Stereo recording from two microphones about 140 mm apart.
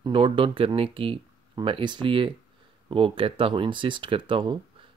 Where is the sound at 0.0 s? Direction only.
40° right (ahead or behind).